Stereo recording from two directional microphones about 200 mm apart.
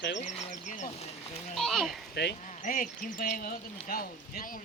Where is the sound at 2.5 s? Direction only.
40° left (ahead or behind).